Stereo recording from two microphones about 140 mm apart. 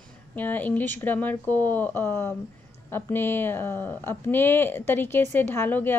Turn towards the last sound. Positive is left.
turn(degrees=15)  # may be behind; listen again after turning